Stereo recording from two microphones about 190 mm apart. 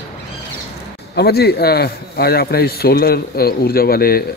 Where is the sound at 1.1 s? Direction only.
55° left (ahead or behind).